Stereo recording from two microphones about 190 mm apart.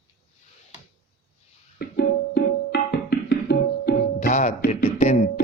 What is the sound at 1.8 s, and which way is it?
Music, 55° left (ahead or behind).